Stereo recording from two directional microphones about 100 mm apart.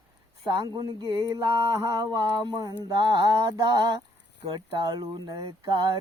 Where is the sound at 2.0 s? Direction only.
45° right (ahead or behind).